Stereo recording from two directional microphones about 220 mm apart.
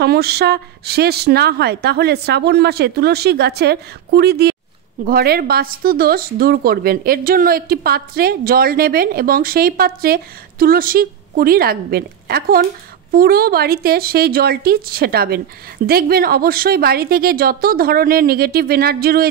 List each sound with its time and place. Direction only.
0.0 s speech: 45° right (ahead or behind)